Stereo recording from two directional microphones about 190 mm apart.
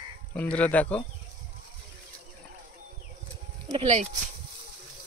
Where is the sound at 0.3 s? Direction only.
5° left (ahead or behind).